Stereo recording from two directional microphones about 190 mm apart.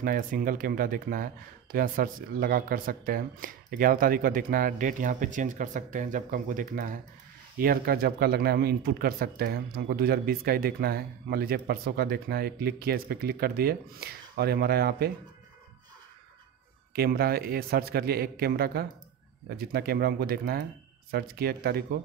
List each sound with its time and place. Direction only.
0.0 s speech: 45° right (ahead or behind)
16.9 s speech: 55° right (ahead or behind)